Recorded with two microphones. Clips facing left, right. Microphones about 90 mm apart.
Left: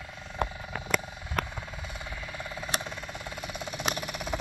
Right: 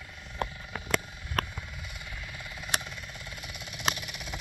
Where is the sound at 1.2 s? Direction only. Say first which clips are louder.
Left 1 dB; 25° left (ahead or behind).